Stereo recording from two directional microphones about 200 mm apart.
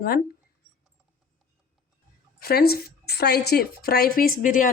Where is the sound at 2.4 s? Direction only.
50° left (ahead or behind).